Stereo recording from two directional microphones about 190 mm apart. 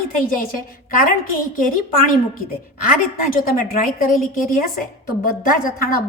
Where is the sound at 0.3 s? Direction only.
45° left (ahead or behind).